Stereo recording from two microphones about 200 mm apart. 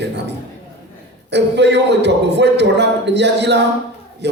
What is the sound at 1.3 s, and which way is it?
A man's voice, 60° right (ahead or behind).